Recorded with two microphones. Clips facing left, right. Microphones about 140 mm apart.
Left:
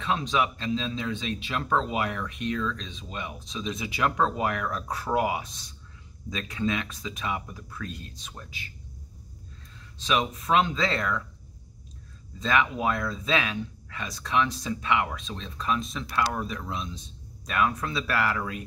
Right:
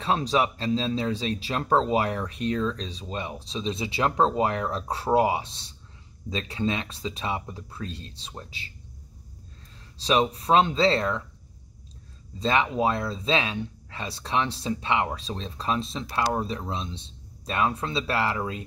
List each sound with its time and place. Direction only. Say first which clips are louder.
0.0 s speech: right 3 dB; 35° right (ahead or behind)
9.9 s speech: right 4 dB; 35° right (ahead or behind)
12.4 s speech: right 2 dB; 30° right (ahead or behind)